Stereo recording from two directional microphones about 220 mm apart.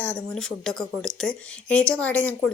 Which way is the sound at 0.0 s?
5° left (ahead or behind).